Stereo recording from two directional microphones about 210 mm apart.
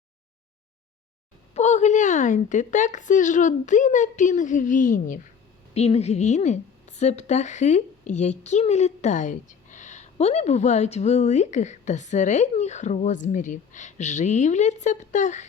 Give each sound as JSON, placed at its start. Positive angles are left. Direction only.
{"t": 1.5, "sound": "a woman's voice", "side_deg": 35}